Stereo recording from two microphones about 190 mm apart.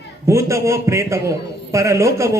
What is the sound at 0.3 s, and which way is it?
A man's voice, 15° right (ahead or behind).